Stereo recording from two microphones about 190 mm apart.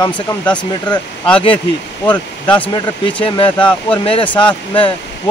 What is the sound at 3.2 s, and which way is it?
Speech, 25° left (ahead or behind).